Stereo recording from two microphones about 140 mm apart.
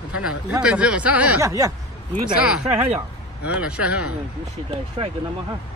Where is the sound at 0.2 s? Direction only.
5° right (ahead or behind).